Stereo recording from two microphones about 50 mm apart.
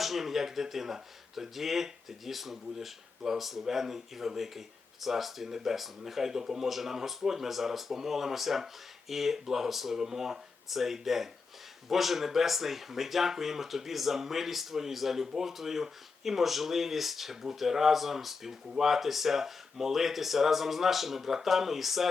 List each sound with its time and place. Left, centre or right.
0.0 s speech: centre